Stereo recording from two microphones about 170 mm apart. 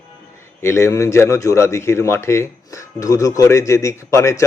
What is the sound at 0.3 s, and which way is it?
A man's voice, 15° left (ahead or behind).